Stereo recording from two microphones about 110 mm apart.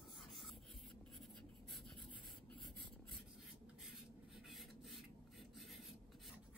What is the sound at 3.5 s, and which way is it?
Writing, centre (ahead or behind).